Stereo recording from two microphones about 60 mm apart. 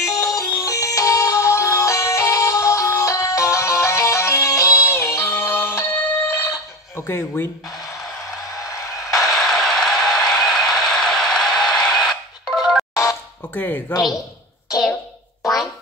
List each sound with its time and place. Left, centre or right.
0.0 s music: left
6.3 s a sound: left
7.1 s speech: left
8.5 s music: left
9.3 s a sound: centre
12.4 s music: centre
12.9 s music: left
13.5 s speech: left
15.4 s a sound: centre